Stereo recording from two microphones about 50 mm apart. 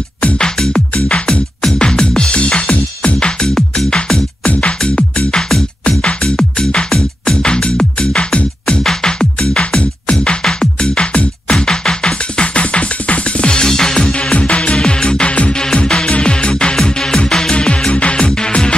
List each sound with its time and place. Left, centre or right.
0.4 s music: centre
4.5 s music: left